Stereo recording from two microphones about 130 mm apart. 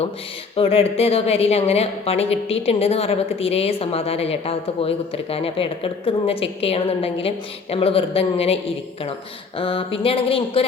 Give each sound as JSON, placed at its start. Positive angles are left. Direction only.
{"t": 0.5, "sound": "a woman's voice", "side_deg": 45}
{"t": 9.6, "sound": "a woman's voice", "side_deg": 45}